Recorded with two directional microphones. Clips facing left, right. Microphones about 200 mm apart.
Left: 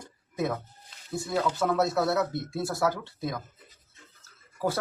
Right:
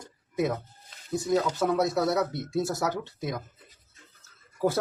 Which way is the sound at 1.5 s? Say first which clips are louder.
Even; 15° right (ahead or behind).